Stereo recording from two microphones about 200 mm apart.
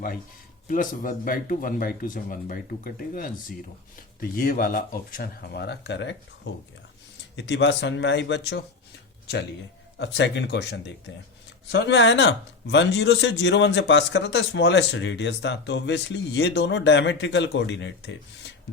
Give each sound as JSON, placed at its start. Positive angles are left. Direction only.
{"t": 0.7, "sound": "speech", "side_deg": 40}
{"t": 7.3, "sound": "speech", "side_deg": 60}
{"t": 10.0, "sound": "speech", "side_deg": 60}